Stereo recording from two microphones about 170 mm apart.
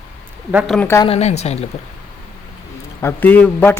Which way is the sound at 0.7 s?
10° left (ahead or behind).